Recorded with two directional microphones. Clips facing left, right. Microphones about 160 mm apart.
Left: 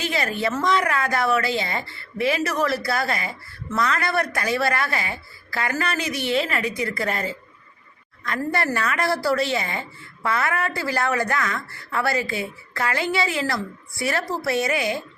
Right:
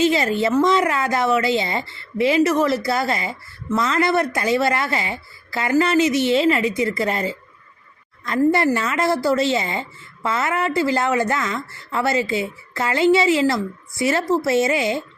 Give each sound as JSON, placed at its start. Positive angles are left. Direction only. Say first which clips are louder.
{"t": 0.0, "sound": "a woman's voice", "louder": "right 7 dB", "side_deg": -25}